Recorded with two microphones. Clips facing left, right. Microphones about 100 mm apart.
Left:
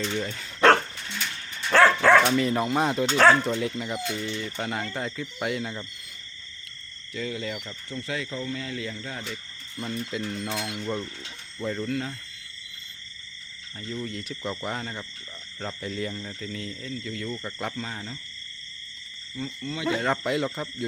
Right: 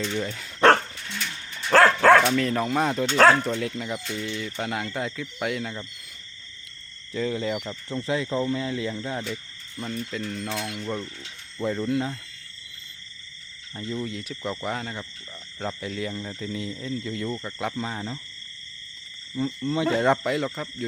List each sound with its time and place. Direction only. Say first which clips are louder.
0.0 s speech: right 1 dB; centre (ahead or behind)
1.7 s dog: right 2 dB; 45° right (ahead or behind)
2.3 s speech: even; 5° left (ahead or behind)
7.1 s speech: right 5 dB; 30° right (ahead or behind)
9.7 s speech: even; 5° left (ahead or behind)
11.6 s speech: right 4 dB; 15° right (ahead or behind)
13.7 s speech: right 4 dB; 20° right (ahead or behind)
14.0 s speech: right 2 dB; 5° right (ahead or behind)
16.1 s speech: right 3 dB; 15° right (ahead or behind)
17.4 s speech: right 2 dB; 5° right (ahead or behind)
17.7 s speech: right 4 dB; 20° right (ahead or behind)
19.4 s speech: right 7 dB; 35° right (ahead or behind)
20.2 s speech: even; centre (ahead or behind)